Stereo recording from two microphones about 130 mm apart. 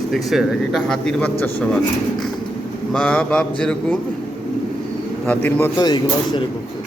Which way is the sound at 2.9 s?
5° left (ahead or behind).